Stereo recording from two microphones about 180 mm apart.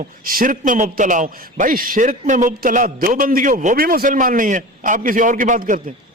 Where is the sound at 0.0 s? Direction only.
50° right (ahead or behind).